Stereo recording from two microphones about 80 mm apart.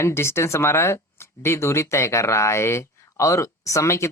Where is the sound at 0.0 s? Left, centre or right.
Left.